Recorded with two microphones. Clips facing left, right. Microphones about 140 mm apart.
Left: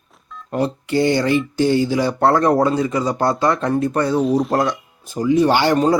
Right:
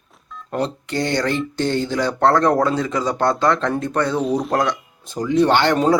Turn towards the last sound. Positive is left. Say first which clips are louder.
# left 1 dB
turn(degrees=0)  # may be behind; listen again after turning